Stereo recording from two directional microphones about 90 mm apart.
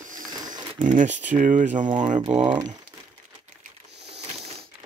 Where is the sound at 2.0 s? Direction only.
55° right (ahead or behind).